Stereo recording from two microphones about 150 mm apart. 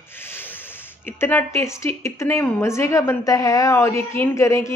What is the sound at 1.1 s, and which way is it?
A woman's voice, 15° left (ahead or behind).